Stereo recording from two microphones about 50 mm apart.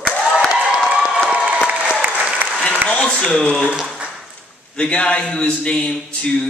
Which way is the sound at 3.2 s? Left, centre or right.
Centre.